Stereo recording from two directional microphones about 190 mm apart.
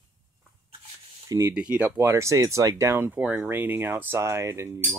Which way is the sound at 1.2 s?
20° right (ahead or behind).